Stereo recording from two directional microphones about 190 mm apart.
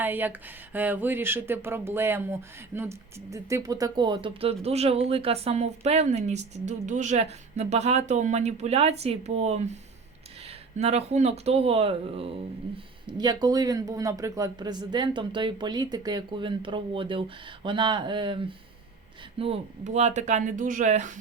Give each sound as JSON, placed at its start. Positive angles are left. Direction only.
{"t": 0.0, "sound": "speech", "side_deg": -10}
{"t": 10.8, "sound": "speech", "side_deg": -35}